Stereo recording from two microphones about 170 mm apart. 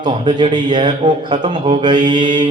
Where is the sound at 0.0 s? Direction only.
25° right (ahead or behind).